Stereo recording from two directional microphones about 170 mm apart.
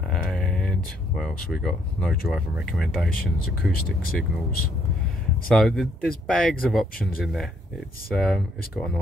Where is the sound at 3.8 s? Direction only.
60° left (ahead or behind).